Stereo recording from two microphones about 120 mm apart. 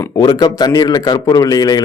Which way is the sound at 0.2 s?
35° left (ahead or behind).